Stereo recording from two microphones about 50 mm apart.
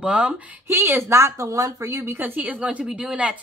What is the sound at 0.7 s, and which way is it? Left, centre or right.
Speech, right.